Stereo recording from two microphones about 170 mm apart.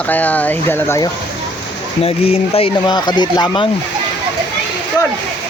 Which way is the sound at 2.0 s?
35° left (ahead or behind).